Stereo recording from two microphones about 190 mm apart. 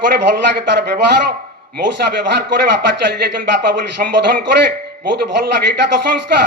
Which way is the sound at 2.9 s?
65° right (ahead or behind).